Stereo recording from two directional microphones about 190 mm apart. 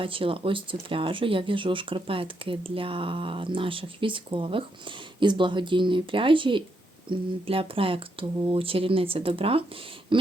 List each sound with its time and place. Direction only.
0.0 s speech: 30° right (ahead or behind)
10.1 s throat clearing: 25° right (ahead or behind)